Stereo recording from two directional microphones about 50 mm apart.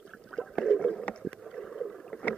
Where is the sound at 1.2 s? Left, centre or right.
Centre.